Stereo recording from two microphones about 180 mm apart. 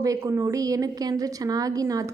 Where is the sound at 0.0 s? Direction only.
20° right (ahead or behind).